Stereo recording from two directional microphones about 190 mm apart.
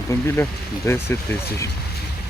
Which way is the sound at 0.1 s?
15° left (ahead or behind).